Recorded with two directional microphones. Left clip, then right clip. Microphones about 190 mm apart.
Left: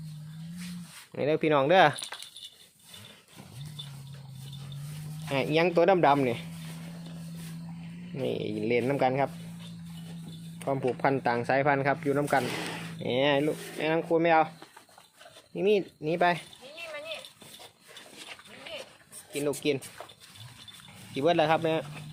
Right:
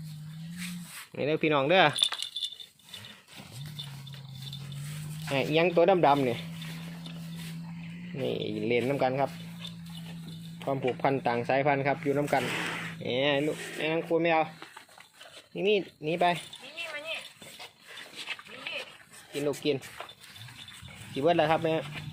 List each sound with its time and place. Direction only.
1.1 s speech: centre (ahead or behind)
5.3 s speech: centre (ahead or behind)
8.1 s speech: 5° left (ahead or behind)
10.6 s speech: 5° left (ahead or behind)
12.4 s a sound: 25° left (ahead or behind)
13.0 s speech: 15° left (ahead or behind)
15.5 s speech: 10° left (ahead or behind)
19.3 s speech: centre (ahead or behind)
21.2 s speech: centre (ahead or behind)